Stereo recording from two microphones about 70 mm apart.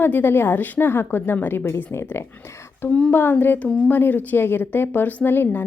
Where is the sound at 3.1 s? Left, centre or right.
Left.